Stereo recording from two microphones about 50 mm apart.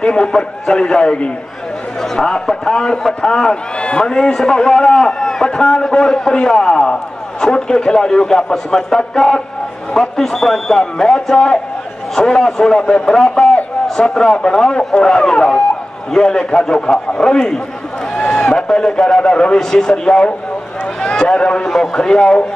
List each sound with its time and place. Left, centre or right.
0.0 s a man's voice: centre
13.1 s a man's voice: centre
18.4 s a sound: left
18.7 s a man's voice: centre